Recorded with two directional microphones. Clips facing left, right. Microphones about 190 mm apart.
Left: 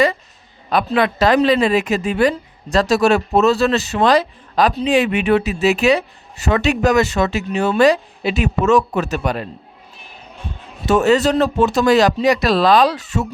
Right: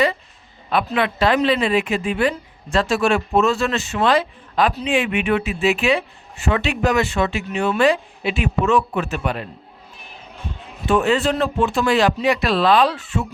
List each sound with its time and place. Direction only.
0.7 s a woman's voice: 40° left (ahead or behind)
10.8 s a woman's voice: 40° left (ahead or behind)